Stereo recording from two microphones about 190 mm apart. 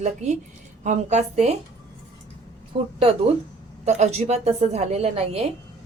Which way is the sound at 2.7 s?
30° right (ahead or behind).